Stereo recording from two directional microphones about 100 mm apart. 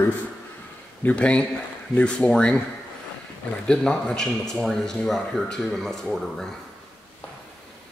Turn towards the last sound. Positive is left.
turn(degrees=5)  # may be behind; listen again after turning